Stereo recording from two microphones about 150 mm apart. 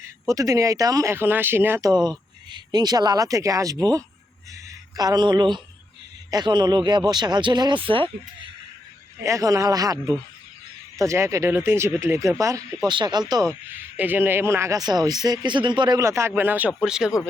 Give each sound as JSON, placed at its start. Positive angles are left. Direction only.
{"t": 0.0, "sound": "speech", "side_deg": -20}
{"t": 1.9, "sound": "speech", "side_deg": -30}
{"t": 9.2, "sound": "speech", "side_deg": -20}
{"t": 13.9, "sound": "speech", "side_deg": -10}